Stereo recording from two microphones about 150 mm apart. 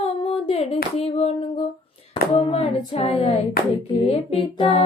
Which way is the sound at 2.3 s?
45° left (ahead or behind).